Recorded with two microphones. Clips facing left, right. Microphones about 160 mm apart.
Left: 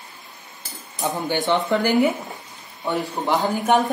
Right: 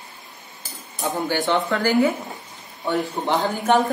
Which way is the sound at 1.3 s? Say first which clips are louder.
Left 2 dB; 20° left (ahead or behind).